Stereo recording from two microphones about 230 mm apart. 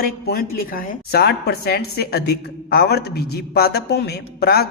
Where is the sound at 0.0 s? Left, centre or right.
Left.